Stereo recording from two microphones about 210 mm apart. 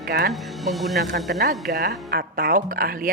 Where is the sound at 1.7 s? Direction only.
45° right (ahead or behind).